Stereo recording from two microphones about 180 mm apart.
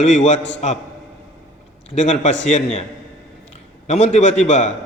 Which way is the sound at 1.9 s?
40° left (ahead or behind).